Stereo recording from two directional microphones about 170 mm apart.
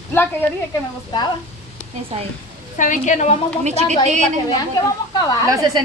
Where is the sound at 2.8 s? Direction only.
50° left (ahead or behind).